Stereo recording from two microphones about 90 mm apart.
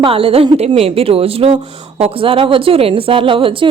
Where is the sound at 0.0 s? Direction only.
90° right.